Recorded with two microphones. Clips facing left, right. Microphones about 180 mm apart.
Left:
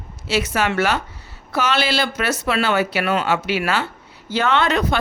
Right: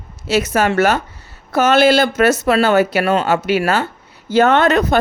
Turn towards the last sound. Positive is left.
turn(degrees=-45)  # may be behind; listen again after turning